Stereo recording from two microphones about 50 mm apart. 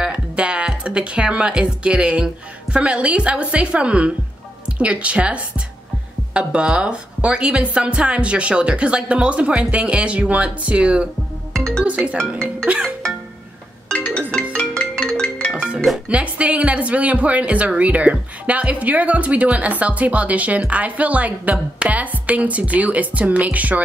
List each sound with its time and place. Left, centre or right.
0.0 s speech: right
11.5 s music: centre
11.8 s speech: right
13.9 s music: left
15.5 s music: right
16.1 s speech: right